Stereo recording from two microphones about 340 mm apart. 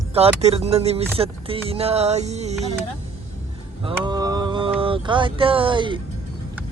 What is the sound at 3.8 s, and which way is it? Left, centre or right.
Mantra, centre.